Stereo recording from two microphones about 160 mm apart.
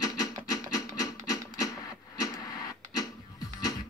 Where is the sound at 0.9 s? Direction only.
20° left (ahead or behind).